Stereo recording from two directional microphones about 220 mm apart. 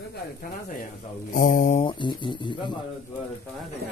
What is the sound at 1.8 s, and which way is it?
Speech, 20° left (ahead or behind).